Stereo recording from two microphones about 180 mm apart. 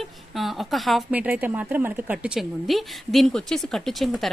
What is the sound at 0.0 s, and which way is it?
Speech, centre (ahead or behind).